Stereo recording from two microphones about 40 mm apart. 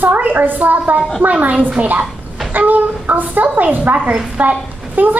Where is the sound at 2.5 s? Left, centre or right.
Right.